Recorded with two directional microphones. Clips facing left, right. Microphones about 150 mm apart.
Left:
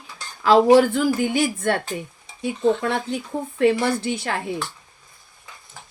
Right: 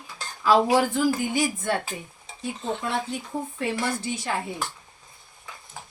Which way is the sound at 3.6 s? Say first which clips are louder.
Left 11 dB; 70° left (ahead or behind).